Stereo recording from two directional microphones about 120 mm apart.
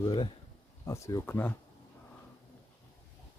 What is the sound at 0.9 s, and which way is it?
Speech, 25° left (ahead or behind).